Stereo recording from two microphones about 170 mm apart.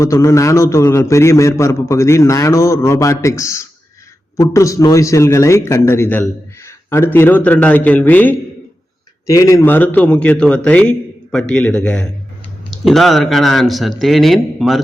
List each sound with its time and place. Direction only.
0.0 s a man's voice: 20° left (ahead or behind); by 14.8 s centre (ahead or behind)